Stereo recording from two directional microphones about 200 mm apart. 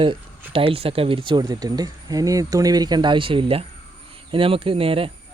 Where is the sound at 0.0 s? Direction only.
25° right (ahead or behind).